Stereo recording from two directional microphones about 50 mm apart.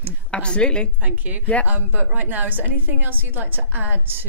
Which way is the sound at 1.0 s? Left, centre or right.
Right.